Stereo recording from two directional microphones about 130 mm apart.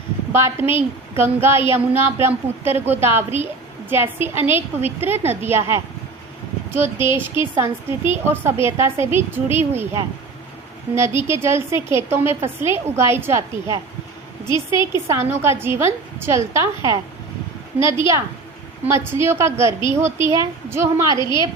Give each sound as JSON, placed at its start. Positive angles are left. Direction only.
{"t": 0.3, "sound": "a woman's voice", "side_deg": -20}
{"t": 14.9, "sound": "a woman's voice", "side_deg": -20}
{"t": 18.9, "sound": "a woman's voice", "side_deg": -20}
{"t": 21.2, "sound": "a woman's voice", "side_deg": 35}